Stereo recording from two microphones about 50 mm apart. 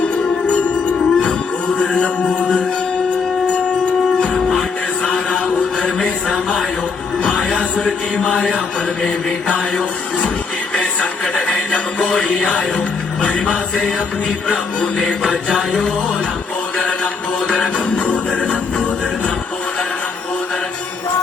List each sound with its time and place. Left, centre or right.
0.4 s music: left
4.4 s a sound: centre
5.0 s a sound: left
7.2 s music: left
16.7 s mantra: left
17.5 s music: centre